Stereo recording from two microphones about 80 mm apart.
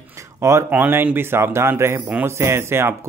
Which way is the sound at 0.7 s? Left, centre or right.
Right.